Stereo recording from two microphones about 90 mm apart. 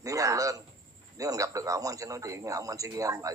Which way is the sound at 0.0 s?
40° right (ahead or behind).